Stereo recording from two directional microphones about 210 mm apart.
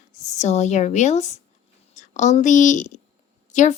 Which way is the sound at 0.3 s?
35° left (ahead or behind).